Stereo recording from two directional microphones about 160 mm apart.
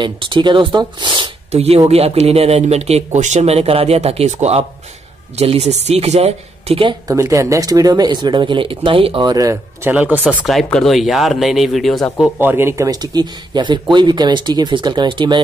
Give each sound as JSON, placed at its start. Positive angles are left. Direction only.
{"t": 0.0, "sound": "speech", "side_deg": -30}
{"t": 7.1, "sound": "speech", "side_deg": -20}
{"t": 9.9, "sound": "speech", "side_deg": -10}
{"t": 10.2, "sound": "speech", "side_deg": 0}
{"t": 12.4, "sound": "speech", "side_deg": -15}